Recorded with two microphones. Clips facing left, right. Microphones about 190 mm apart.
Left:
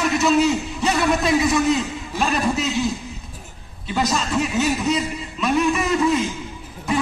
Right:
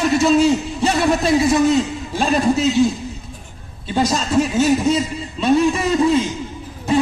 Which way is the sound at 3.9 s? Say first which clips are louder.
Right 4 dB; 30° right (ahead or behind).